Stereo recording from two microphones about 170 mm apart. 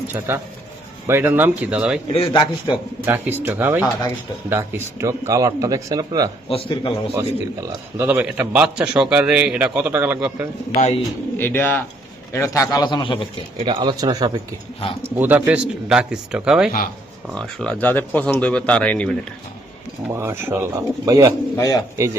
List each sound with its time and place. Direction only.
0.3 s a man's voice: 15° right (ahead or behind)
2.1 s a man's voice: 30° left (ahead or behind)
3.1 s a man's voice: 10° right (ahead or behind)
6.5 s a man's voice: 30° left (ahead or behind)
7.1 s a man's voice: 15° right (ahead or behind)
10.7 s speech: 35° left (ahead or behind)
11.3 s a man's voice: 10° left (ahead or behind); by 13.1 s 30° left (ahead or behind)
13.6 s speech: 30° right (ahead or behind)
15.1 s speech: 10° right (ahead or behind); by 19.1 s 5° left (ahead or behind)
20.1 s a man's voice: 15° right (ahead or behind)
21.5 s a man's voice: 20° left (ahead or behind)
21.9 s a man's voice: 15° right (ahead or behind)